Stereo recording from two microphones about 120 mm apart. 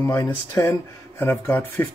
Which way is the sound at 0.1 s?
25° left (ahead or behind).